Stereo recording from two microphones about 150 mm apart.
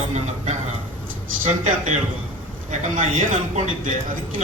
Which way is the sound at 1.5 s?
55° right (ahead or behind).